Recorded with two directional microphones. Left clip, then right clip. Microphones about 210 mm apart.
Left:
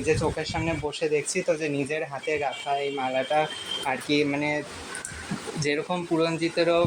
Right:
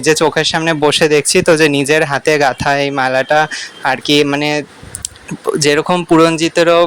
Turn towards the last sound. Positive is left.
turn(degrees=-35)  # may be behind; listen again after turning